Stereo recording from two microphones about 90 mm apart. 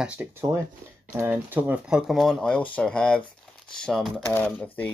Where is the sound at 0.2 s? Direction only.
20° right (ahead or behind).